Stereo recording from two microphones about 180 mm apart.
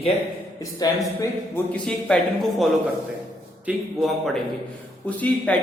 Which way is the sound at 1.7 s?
5° left (ahead or behind).